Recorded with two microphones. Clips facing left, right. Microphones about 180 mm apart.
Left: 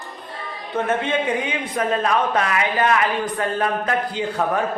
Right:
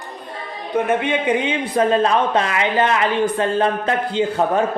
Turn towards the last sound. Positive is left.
turn(degrees=-25)  # may be behind; listen again after turning